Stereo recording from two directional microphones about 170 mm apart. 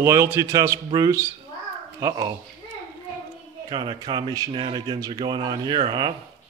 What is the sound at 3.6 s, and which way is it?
Speech, 25° right (ahead or behind).